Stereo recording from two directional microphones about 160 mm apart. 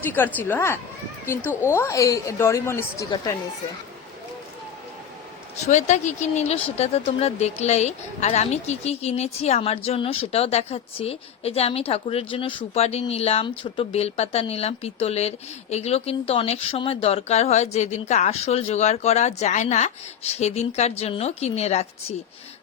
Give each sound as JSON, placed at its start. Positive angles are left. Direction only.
{"t": 0.0, "sound": "a woman's voice", "side_deg": 10}
{"t": 5.6, "sound": "speech", "side_deg": 50}